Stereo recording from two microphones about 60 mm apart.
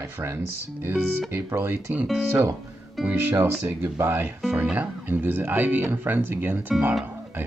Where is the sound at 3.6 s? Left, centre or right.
Right.